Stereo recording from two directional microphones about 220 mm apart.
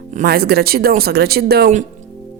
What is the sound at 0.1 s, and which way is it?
A woman's voice, 40° right (ahead or behind).